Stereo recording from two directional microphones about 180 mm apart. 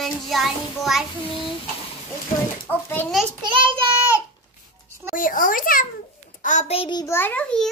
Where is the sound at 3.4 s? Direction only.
30° right (ahead or behind).